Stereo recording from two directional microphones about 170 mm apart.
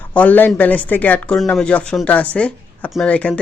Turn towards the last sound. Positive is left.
turn(degrees=5)  # may be behind; listen again after turning